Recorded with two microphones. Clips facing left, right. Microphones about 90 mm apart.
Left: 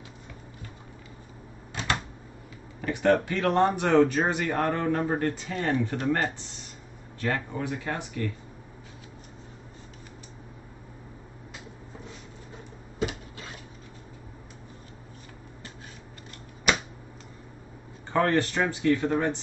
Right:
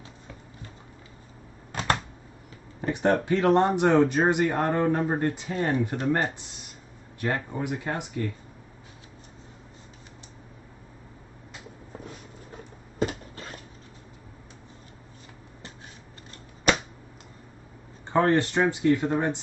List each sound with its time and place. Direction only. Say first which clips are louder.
1.7 s typewriter: right 3 dB; 40° right (ahead or behind)
2.8 s speech: left 1 dB; 30° right (ahead or behind)
18.1 s speech: right 2 dB; 20° right (ahead or behind)